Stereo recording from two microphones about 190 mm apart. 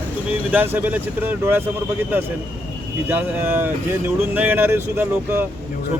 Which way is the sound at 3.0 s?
10° right (ahead or behind).